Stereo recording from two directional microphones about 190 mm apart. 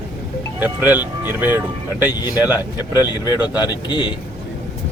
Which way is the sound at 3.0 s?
20° left (ahead or behind).